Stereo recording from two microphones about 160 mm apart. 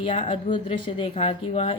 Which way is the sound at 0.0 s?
30° left (ahead or behind).